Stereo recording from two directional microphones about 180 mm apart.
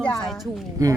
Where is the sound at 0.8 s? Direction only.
20° right (ahead or behind).